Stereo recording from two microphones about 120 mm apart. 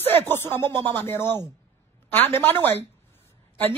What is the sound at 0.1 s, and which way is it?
A man's voice, 20° left (ahead or behind).